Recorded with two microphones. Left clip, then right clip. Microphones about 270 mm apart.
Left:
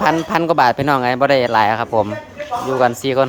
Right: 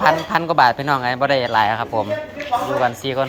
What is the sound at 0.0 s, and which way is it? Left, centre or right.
A man's voice, left.